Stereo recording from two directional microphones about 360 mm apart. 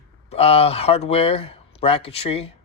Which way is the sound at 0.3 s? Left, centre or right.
Centre.